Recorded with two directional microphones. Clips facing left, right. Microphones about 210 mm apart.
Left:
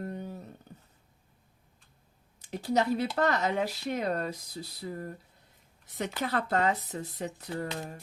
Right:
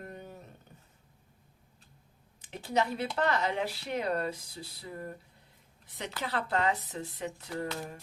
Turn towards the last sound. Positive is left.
turn(degrees=40)  # may be behind; listen again after turning